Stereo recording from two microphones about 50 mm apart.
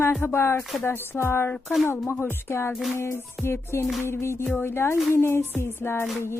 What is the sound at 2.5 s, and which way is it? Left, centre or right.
Music, left.